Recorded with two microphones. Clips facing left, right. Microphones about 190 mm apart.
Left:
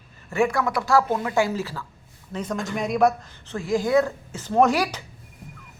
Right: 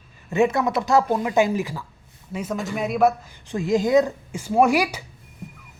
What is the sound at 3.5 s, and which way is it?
Speech, 20° right (ahead or behind).